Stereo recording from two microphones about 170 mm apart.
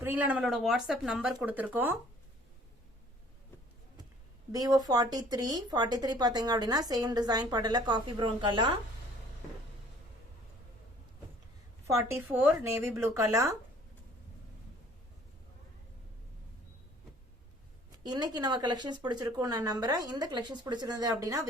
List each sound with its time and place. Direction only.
0.0 s speech: 10° right (ahead or behind)
4.5 s speech: 20° right (ahead or behind)
11.9 s speech: 15° right (ahead or behind)
18.0 s speech: 25° right (ahead or behind)